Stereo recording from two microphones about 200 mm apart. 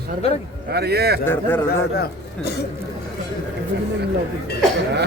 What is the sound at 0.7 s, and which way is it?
Speech, 55° right (ahead or behind).